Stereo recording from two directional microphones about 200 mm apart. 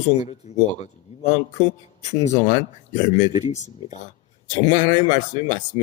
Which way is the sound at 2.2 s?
35° left (ahead or behind).